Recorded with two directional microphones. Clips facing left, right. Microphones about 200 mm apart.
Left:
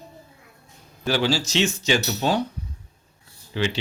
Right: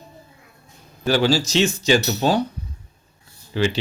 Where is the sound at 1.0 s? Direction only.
40° right (ahead or behind).